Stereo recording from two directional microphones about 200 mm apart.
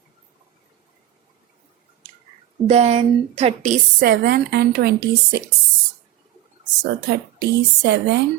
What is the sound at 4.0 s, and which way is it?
A woman's voice, 50° right (ahead or behind).